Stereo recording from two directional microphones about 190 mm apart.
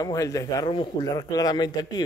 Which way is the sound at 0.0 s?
15° left (ahead or behind).